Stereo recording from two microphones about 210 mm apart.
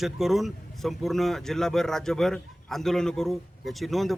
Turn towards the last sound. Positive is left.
turn(degrees=0)  # may be behind; listen again after turning